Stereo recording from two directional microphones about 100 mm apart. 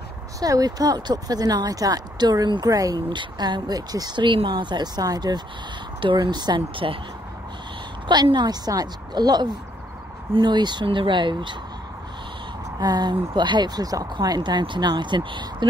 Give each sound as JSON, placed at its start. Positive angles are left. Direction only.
{"t": 0.4, "sound": "a woman's voice", "side_deg": -40}
{"t": 5.9, "sound": "speech", "side_deg": -55}
{"t": 8.1, "sound": "a woman's voice", "side_deg": -45}
{"t": 12.8, "sound": "a woman's voice", "side_deg": -45}